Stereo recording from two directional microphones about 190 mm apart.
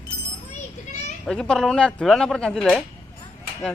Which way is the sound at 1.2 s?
5° left (ahead or behind).